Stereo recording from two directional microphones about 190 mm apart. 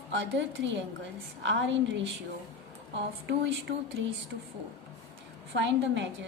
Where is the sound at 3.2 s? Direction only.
65° right (ahead or behind).